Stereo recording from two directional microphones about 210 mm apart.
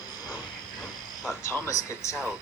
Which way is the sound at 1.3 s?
15° left (ahead or behind).